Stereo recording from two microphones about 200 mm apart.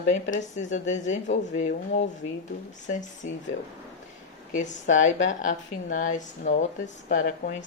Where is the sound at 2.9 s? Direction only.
40° left (ahead or behind).